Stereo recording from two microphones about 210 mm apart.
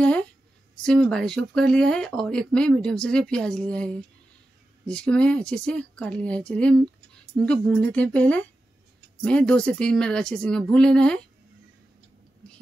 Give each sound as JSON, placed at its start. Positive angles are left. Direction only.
{"t": 0.0, "sound": "a woman's voice", "side_deg": 5}